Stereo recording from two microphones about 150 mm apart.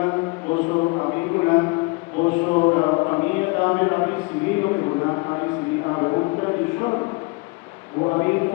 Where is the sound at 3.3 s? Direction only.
20° left (ahead or behind).